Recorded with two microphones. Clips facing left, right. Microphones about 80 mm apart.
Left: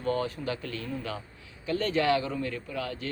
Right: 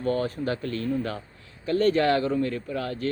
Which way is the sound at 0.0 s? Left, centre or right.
Right.